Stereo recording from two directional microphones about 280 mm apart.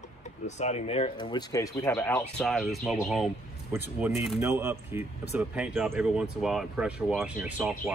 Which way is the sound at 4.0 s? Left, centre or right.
Centre.